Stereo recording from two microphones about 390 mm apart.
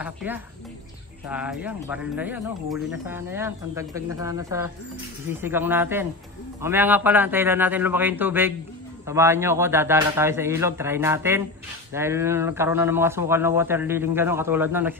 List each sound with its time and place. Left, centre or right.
0.0 s a man's voice: centre